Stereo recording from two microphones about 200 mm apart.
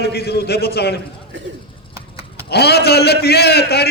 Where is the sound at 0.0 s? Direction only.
55° left (ahead or behind).